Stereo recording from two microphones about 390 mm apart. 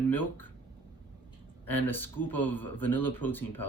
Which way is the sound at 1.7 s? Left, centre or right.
Centre.